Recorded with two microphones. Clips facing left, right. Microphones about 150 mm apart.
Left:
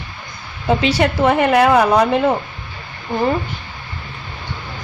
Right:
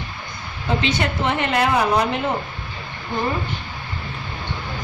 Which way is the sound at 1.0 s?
90° left.